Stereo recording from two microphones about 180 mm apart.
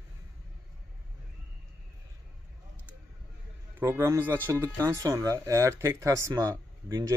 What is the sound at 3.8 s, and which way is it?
Speech, 15° right (ahead or behind).